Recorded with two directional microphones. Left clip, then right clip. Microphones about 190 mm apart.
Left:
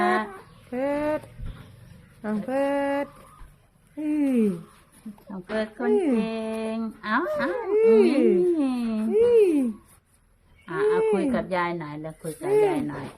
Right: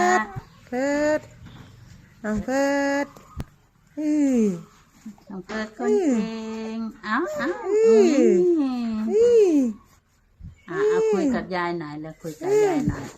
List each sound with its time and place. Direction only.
0.0 s a sound: 10° right (ahead or behind)
0.7 s speech: 15° right (ahead or behind)
2.5 s speech: 15° right (ahead or behind)
10.7 s speech: 10° right (ahead or behind)